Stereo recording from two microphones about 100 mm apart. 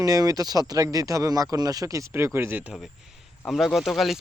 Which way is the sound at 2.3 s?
20° right (ahead or behind).